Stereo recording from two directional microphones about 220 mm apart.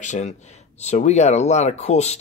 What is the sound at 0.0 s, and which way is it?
Speech, 35° left (ahead or behind).